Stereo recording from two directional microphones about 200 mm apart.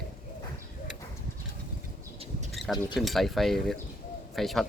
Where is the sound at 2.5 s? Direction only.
Centre (ahead or behind).